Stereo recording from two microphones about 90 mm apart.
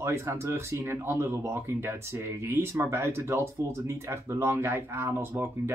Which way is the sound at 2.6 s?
30° right (ahead or behind).